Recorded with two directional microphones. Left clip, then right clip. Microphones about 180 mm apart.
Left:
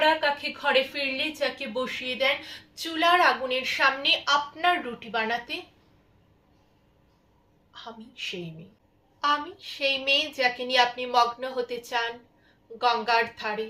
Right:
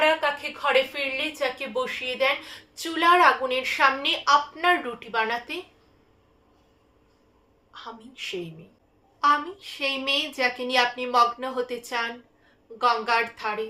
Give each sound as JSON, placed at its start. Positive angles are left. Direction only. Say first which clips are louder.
{"t": 0.0, "sound": "a woman's voice", "louder": "right 1 dB", "side_deg": -20}
{"t": 7.7, "sound": "a woman's voice", "louder": "right 2 dB", "side_deg": -20}